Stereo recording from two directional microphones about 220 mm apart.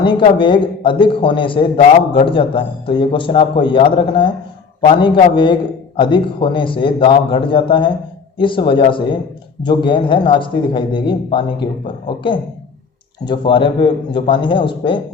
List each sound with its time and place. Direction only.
0.0 s a man's voice: 20° left (ahead or behind)